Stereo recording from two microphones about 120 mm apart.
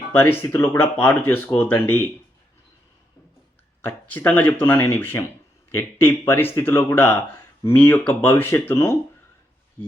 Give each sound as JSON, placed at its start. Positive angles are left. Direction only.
{"t": 0.1, "sound": "speech", "side_deg": 15}
{"t": 3.8, "sound": "speech", "side_deg": 20}